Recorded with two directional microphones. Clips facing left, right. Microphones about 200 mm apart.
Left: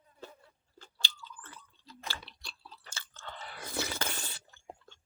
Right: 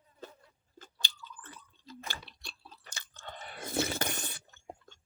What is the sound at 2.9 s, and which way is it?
Squish, 20° right (ahead or behind).